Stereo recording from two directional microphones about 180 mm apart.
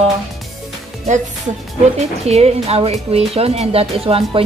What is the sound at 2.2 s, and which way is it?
Speech, 35° right (ahead or behind).